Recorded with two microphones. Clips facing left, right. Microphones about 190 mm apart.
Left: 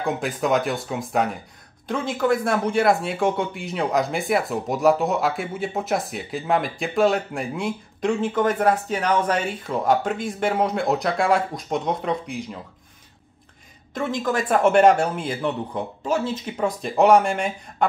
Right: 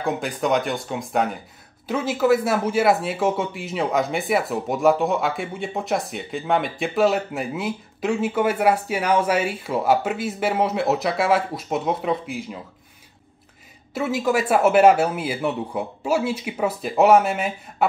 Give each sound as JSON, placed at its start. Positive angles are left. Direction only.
{"t": 0.0, "sound": "speech", "side_deg": 0}
{"t": 13.9, "sound": "speech", "side_deg": -5}